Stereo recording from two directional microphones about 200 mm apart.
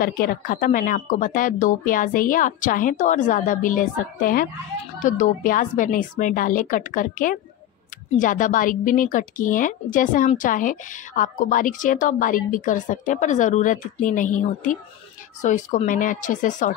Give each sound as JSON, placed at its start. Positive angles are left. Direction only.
{"t": 0.0, "sound": "a woman's voice", "side_deg": 45}
{"t": 15.4, "sound": "a woman's voice", "side_deg": 40}